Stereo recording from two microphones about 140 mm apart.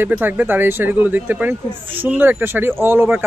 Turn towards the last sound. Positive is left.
turn(degrees=-15)  # may be behind; listen again after turning